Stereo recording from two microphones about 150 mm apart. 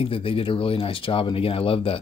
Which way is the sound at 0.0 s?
35° left (ahead or behind).